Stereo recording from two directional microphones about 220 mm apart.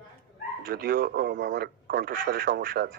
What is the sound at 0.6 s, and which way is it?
A man's voice, 45° right (ahead or behind).